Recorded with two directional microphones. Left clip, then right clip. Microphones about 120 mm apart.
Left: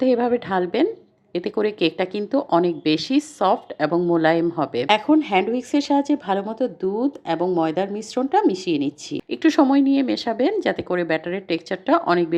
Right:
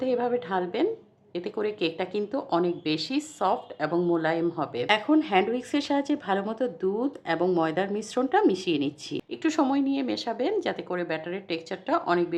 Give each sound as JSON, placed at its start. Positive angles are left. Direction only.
{"t": 0.0, "sound": "speech", "side_deg": 40}
{"t": 9.3, "sound": "speech", "side_deg": 40}